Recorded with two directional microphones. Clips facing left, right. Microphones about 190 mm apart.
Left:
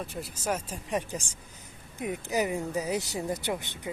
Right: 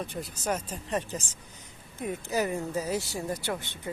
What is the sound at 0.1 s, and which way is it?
Speech, 5° left (ahead or behind).